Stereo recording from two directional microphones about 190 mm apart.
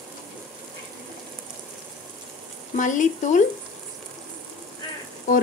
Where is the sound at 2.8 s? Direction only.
40° left (ahead or behind).